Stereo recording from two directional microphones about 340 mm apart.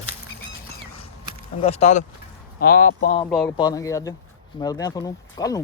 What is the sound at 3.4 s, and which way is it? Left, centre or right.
Speech, centre.